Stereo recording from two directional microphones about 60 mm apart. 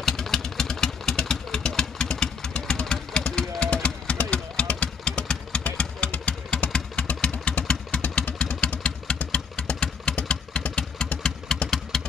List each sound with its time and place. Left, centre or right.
0.0 s vehicle: centre
11.9 s engine: centre